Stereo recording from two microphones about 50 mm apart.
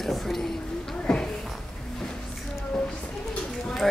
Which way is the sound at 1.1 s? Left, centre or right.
Centre.